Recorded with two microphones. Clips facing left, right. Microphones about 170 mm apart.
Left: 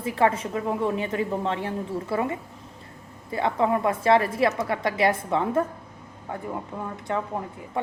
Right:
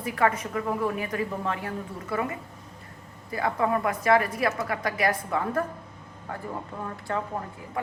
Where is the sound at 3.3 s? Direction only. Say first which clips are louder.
Left 2 dB; 25° left (ahead or behind).